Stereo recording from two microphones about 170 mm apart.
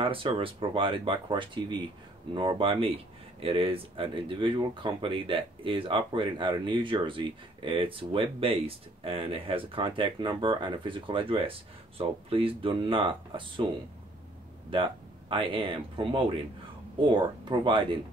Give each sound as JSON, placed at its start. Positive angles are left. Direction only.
{"t": 0.0, "sound": "speech", "side_deg": -30}
{"t": 14.7, "sound": "speech", "side_deg": -30}